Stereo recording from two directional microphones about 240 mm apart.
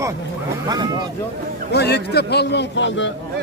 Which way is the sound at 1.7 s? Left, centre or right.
Left.